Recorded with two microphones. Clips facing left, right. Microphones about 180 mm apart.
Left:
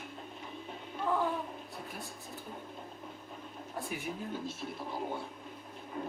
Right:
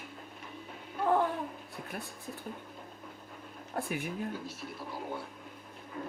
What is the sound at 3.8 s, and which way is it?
Speech, 60° right (ahead or behind).